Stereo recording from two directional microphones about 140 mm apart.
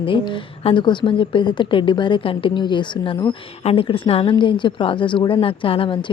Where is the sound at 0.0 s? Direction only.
40° left (ahead or behind).